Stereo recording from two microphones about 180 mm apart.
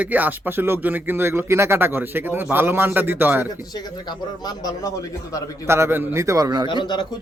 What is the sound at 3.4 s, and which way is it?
A man's voice, 20° left (ahead or behind).